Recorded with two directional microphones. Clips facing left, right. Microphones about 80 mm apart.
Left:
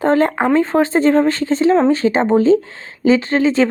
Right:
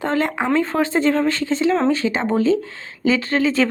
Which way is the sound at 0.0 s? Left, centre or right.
Left.